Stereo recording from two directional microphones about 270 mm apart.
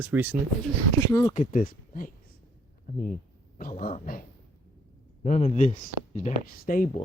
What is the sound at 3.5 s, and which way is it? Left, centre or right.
Speech, left.